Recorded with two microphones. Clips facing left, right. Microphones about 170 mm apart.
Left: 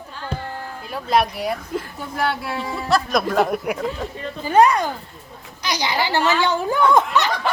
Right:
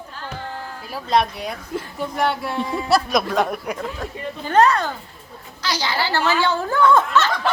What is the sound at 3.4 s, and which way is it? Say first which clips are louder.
A woman's voice: left 3 dB; 10° left (ahead or behind).